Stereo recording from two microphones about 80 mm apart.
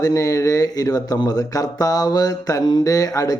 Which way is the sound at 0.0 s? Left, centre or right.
Left.